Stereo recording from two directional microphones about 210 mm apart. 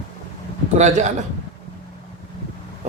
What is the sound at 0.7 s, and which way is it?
Speech, 35° right (ahead or behind).